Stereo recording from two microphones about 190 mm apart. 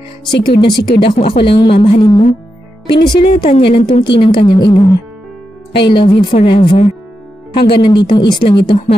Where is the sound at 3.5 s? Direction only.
30° left (ahead or behind).